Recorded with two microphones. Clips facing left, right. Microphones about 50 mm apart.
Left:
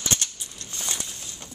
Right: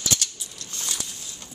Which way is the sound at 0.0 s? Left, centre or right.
Left.